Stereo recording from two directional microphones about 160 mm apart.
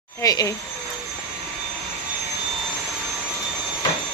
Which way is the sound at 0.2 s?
25° left (ahead or behind).